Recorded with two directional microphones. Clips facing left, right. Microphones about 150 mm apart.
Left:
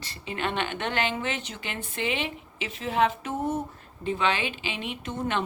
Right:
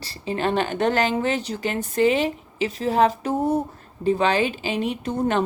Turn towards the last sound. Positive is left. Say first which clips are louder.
# right 7 dB
turn(degrees=-40)  # may be behind; listen again after turning